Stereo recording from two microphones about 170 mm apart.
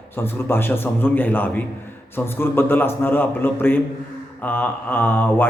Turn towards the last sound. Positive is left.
turn(degrees=10)  # may be behind; listen again after turning